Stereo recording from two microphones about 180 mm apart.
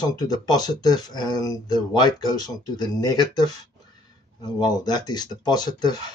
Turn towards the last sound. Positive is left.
turn(degrees=25)  # may be behind; listen again after turning